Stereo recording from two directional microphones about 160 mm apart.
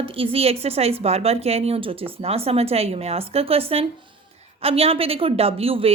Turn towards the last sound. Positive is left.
turn(degrees=-35)  # may be behind; listen again after turning